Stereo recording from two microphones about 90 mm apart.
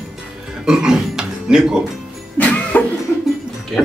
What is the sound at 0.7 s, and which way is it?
Speech, 10° right (ahead or behind).